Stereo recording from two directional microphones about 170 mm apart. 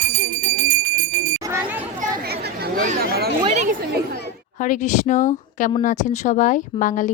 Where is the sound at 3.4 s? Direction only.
30° right (ahead or behind).